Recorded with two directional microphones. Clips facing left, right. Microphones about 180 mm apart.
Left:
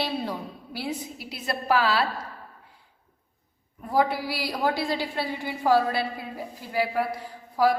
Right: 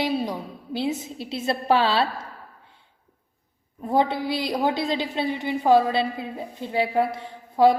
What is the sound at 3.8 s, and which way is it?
A woman's voice, 25° right (ahead or behind).